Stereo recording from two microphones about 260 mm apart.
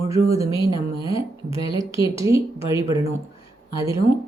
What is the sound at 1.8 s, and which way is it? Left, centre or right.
A woman's voice, centre.